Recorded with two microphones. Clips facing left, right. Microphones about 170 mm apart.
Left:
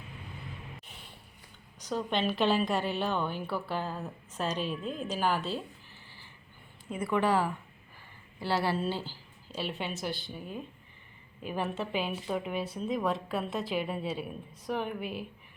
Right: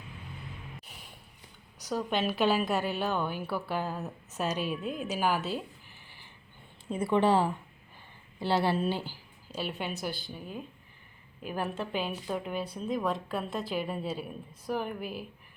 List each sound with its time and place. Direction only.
1.8 s a woman's voice: 5° right (ahead or behind)
6.8 s speech: 30° right (ahead or behind)
9.5 s a woman's voice: centre (ahead or behind)